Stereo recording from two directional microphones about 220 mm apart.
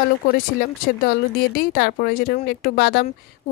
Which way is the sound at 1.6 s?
45° left (ahead or behind).